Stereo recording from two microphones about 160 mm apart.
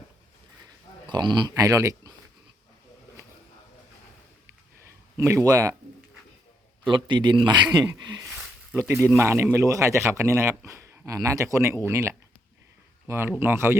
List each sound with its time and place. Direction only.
0.6 s a sound: 25° right (ahead or behind)
5.1 s a man's voice: 20° right (ahead or behind)
6.8 s a man's voice: 30° right (ahead or behind)
8.7 s a man's voice: 15° right (ahead or behind)